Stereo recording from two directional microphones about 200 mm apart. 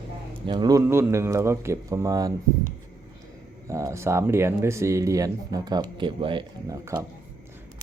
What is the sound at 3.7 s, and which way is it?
Speech, 15° right (ahead or behind).